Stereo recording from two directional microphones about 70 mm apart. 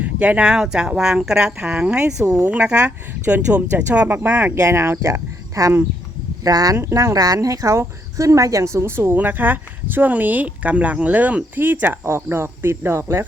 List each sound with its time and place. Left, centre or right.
0.0 s speech: centre
4.5 s speech: right
6.4 s speech: right